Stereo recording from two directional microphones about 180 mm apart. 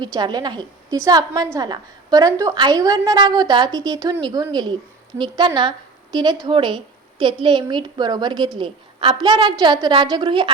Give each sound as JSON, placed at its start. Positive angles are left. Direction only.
{"t": 0.2, "sound": "a woman's voice", "side_deg": -25}